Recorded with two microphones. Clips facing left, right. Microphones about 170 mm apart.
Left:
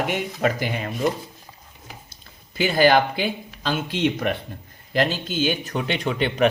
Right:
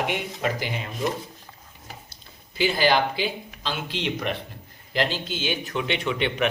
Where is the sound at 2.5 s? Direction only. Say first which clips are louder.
Left 4 dB; 50° left (ahead or behind).